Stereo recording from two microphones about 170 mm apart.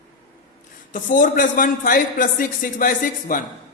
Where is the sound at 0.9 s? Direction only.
50° left (ahead or behind).